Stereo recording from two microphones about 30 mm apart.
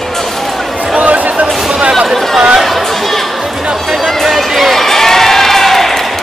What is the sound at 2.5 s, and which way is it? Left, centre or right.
Chatter, centre.